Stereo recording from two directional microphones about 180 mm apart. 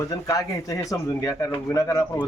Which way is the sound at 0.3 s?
20° left (ahead or behind).